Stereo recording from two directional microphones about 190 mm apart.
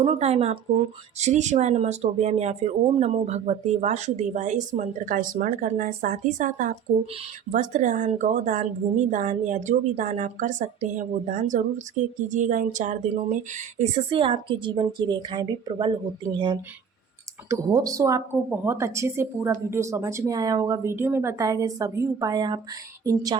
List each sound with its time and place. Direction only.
0.0 s speech: 35° right (ahead or behind)